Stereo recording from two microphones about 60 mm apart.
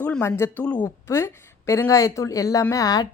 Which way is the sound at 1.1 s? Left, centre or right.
Left.